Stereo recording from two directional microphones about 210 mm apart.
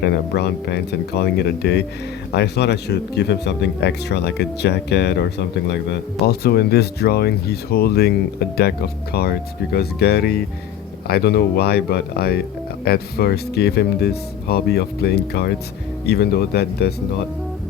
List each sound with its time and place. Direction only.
0.0 s speech: 50° left (ahead or behind)